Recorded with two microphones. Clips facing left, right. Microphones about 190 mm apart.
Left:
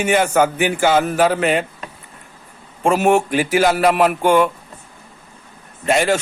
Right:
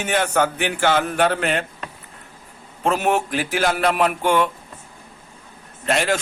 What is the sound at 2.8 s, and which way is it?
A man's voice, 10° left (ahead or behind).